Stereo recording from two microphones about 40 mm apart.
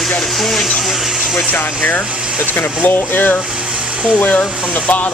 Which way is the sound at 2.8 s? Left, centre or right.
Left.